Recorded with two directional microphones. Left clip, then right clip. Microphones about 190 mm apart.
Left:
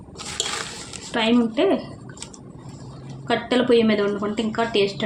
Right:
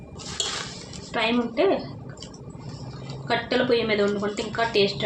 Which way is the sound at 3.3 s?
40° left (ahead or behind).